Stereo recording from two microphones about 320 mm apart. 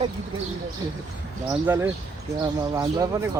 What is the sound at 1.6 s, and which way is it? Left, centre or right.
Speech, centre.